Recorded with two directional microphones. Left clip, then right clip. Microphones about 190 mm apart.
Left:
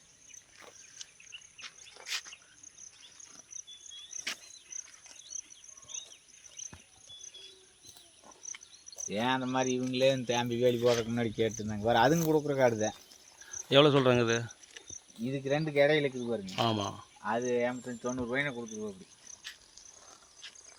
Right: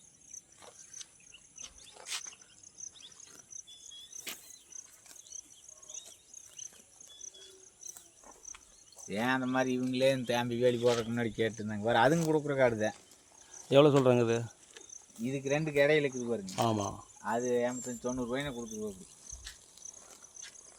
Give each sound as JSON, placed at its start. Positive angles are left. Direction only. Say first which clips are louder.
{"t": 0.9, "sound": "cricket", "louder": "even", "side_deg": 10}
{"t": 2.0, "sound": "a sound", "louder": "left 3 dB", "side_deg": 0}
{"t": 3.5, "sound": "cricket", "louder": "left 2 dB", "side_deg": -70}
{"t": 5.3, "sound": "a sound", "louder": "left 5 dB", "side_deg": -35}
{"t": 8.4, "sound": "insect", "louder": "left 5 dB", "side_deg": -65}
{"t": 9.1, "sound": "speech", "louder": "even", "side_deg": 50}
{"t": 13.5, "sound": "speech", "louder": "even", "side_deg": 0}
{"t": 15.4, "sound": "speech", "louder": "left 1 dB", "side_deg": 55}
{"t": 15.7, "sound": "speech", "louder": "left 1 dB", "side_deg": 25}
{"t": 16.5, "sound": "speech", "louder": "left 1 dB", "side_deg": 5}
{"t": 16.7, "sound": "speech", "louder": "even", "side_deg": -5}
{"t": 17.2, "sound": "speech", "louder": "left 1 dB", "side_deg": 30}